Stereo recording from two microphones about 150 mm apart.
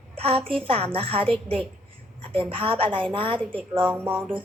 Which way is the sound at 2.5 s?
35° right (ahead or behind).